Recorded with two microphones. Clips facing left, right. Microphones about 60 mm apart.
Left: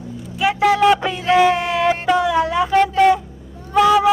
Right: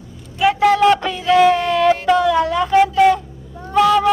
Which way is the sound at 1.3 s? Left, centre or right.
Centre.